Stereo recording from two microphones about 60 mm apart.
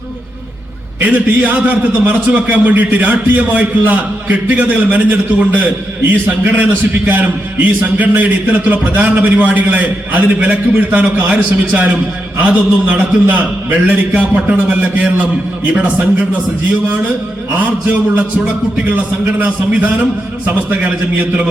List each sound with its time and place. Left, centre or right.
0.9 s a man's voice: right
17.6 s a man's voice: right
19.4 s a man's voice: right